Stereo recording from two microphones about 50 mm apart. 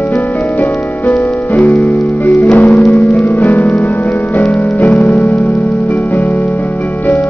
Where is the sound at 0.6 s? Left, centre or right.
Left.